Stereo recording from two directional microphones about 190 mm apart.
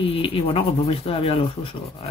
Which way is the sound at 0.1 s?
30° left (ahead or behind).